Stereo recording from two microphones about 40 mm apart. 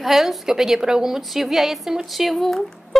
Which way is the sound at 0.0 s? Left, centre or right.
Centre.